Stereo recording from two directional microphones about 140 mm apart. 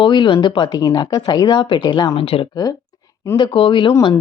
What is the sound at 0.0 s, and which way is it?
Speech, 35° left (ahead or behind).